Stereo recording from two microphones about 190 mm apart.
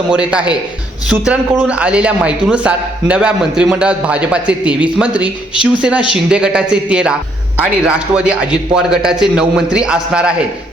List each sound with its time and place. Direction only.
0.1 s a man's voice: 5° right (ahead or behind)